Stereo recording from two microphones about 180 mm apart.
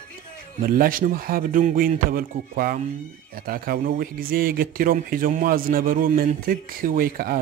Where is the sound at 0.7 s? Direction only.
50° right (ahead or behind).